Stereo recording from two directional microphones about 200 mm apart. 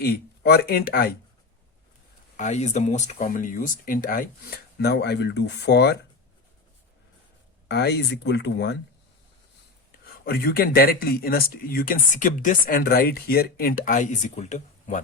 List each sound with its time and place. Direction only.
0.0 s speech: 50° left (ahead or behind)
2.3 s speech: 35° left (ahead or behind); by 6.0 s 60° left (ahead or behind)
7.7 s speech: 55° left (ahead or behind)
10.2 s speech: 50° left (ahead or behind)